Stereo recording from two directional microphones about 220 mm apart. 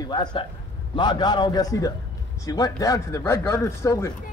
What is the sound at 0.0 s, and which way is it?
A woman's voice, 20° left (ahead or behind).